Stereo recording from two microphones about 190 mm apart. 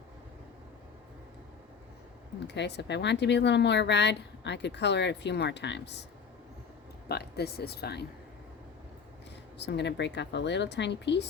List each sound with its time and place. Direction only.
2.5 s a woman's voice: 65° left (ahead or behind)
7.1 s a woman's voice: 55° left (ahead or behind)
9.6 s a woman's voice: 65° left (ahead or behind)